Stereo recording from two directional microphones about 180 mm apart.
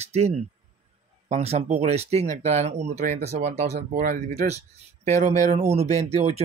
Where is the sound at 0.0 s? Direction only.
35° right (ahead or behind).